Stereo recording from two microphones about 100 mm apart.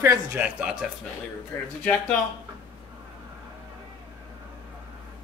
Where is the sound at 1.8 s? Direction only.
15° left (ahead or behind).